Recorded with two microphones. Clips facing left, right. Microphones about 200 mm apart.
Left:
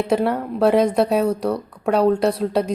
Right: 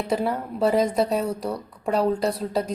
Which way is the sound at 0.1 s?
70° left (ahead or behind).